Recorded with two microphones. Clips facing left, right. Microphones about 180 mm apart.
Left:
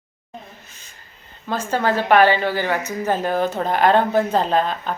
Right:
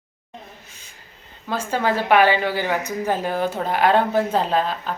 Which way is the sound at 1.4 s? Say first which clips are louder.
Left 1 dB; 10° right (ahead or behind).